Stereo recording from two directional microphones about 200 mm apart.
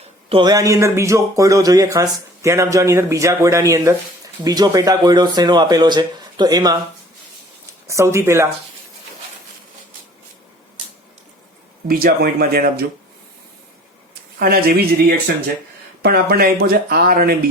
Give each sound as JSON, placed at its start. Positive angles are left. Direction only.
{"t": 0.3, "sound": "speech", "side_deg": -25}
{"t": 7.9, "sound": "speech", "side_deg": -15}
{"t": 11.9, "sound": "speech", "side_deg": -45}
{"t": 14.3, "sound": "speech", "side_deg": -45}
{"t": 16.0, "sound": "speech", "side_deg": -50}